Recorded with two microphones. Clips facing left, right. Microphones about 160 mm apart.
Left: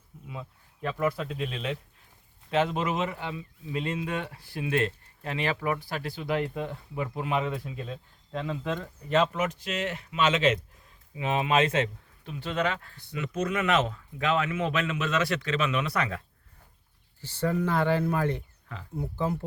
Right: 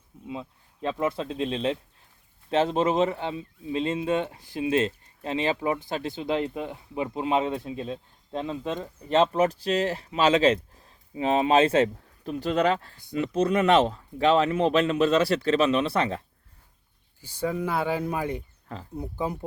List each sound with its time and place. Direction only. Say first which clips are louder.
0.3 s speech: right 5 dB; 25° right (ahead or behind)
17.2 s speech: left 1 dB; 10° right (ahead or behind)